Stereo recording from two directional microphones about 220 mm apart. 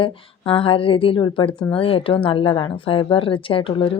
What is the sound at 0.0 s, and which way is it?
Speech, 25° left (ahead or behind).